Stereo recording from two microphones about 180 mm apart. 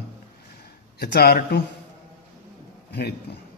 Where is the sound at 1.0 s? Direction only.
60° left (ahead or behind).